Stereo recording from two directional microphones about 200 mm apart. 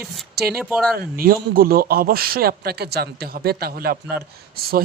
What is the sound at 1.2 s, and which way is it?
A man's voice, 45° right (ahead or behind).